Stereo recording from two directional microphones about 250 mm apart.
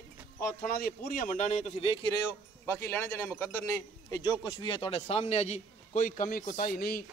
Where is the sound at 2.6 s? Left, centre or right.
Centre.